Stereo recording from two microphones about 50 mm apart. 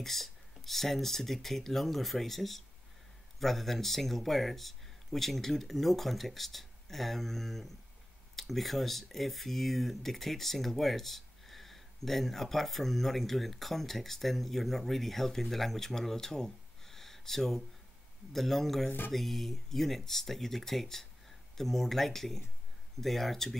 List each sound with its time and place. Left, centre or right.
0.0 s speech: centre
18.9 s music: left
19.1 s speech: centre